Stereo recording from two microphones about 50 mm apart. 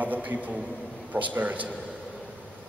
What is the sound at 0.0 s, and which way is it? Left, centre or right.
A man's voice, right.